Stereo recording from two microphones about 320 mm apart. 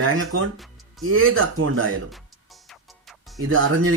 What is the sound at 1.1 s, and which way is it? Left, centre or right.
Speech, right.